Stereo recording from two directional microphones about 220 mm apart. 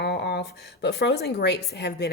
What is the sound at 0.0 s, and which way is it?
Speech, 50° left (ahead or behind).